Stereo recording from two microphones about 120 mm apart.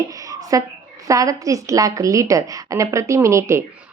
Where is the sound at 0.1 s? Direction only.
30° right (ahead or behind).